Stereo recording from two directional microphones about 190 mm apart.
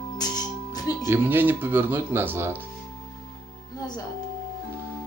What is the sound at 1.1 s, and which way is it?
Speech, 10° right (ahead or behind).